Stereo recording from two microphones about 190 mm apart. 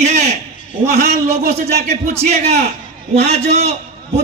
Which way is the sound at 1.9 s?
35° right (ahead or behind).